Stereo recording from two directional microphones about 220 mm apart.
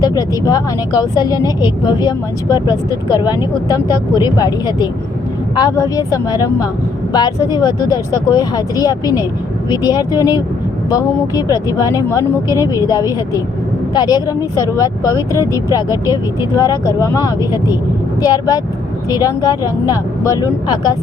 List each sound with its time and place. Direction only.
0.0 s speech: 15° left (ahead or behind)